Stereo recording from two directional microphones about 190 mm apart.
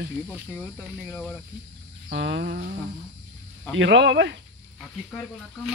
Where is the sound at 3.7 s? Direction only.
75° right (ahead or behind).